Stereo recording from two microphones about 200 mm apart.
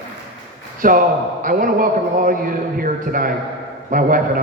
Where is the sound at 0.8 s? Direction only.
45° right (ahead or behind).